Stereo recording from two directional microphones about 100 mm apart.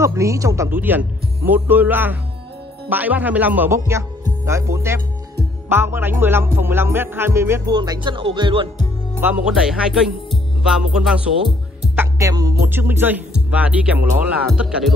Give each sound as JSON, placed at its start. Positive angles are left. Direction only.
{"t": 0.0, "sound": "speech", "side_deg": -30}
{"t": 0.7, "sound": "music", "side_deg": -20}
{"t": 2.9, "sound": "speech", "side_deg": -15}
{"t": 3.7, "sound": "music", "side_deg": -30}
{"t": 7.6, "sound": "music", "side_deg": -45}
{"t": 9.2, "sound": "speech", "side_deg": -15}
{"t": 12.2, "sound": "music", "side_deg": -35}
{"t": 12.6, "sound": "speech", "side_deg": -20}